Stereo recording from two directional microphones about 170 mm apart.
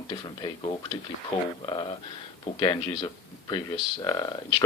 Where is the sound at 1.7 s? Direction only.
30° left (ahead or behind).